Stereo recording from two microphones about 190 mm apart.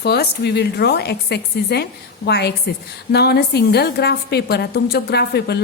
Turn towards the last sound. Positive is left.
turn(degrees=60)  # may be behind; listen again after turning